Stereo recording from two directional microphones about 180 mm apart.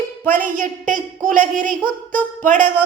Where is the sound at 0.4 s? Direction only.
45° right (ahead or behind).